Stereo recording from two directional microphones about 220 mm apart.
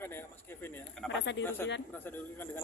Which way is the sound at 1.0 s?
55° left (ahead or behind).